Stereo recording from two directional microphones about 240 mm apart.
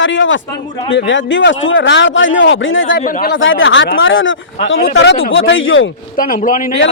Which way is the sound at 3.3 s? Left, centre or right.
Left.